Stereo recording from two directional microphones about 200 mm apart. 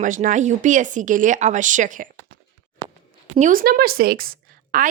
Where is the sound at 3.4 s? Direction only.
45° right (ahead or behind).